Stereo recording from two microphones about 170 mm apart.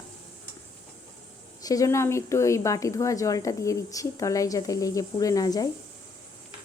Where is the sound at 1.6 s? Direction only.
20° left (ahead or behind).